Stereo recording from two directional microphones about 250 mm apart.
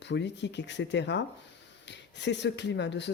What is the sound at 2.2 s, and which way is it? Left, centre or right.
Speech, left.